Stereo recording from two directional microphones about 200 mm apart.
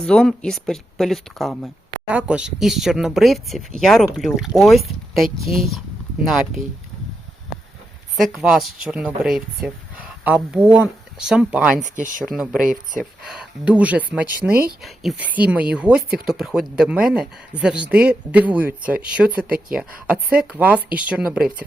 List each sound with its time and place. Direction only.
0.0 s speech: 5° left (ahead or behind)
8.1 s speech: centre (ahead or behind)
11.8 s speech: 40° right (ahead or behind)
12.2 s speech: centre (ahead or behind)